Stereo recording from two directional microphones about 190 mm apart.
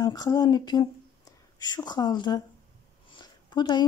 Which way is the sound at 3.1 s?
25° left (ahead or behind).